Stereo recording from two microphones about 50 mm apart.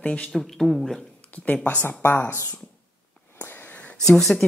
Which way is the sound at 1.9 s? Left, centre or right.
Left.